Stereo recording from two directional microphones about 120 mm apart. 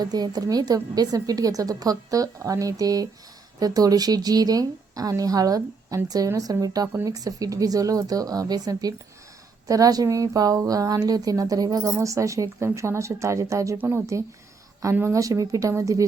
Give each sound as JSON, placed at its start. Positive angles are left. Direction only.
{"t": 0.0, "sound": "a woman's voice", "side_deg": -35}